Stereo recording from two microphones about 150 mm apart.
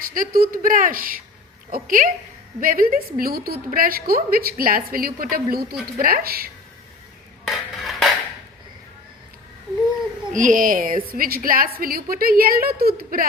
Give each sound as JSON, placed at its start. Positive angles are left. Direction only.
{"t": 0.0, "sound": "a woman's voice", "side_deg": -70}
{"t": 7.4, "sound": "dishes", "side_deg": 0}
{"t": 10.3, "sound": "a woman's voice", "side_deg": -60}